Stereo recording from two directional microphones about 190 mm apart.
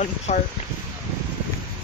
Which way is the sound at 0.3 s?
35° left (ahead or behind).